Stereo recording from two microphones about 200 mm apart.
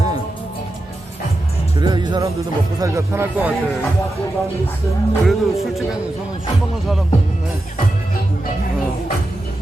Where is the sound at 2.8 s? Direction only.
15° right (ahead or behind).